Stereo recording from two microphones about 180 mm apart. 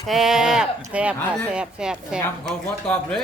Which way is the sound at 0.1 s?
Centre (ahead or behind).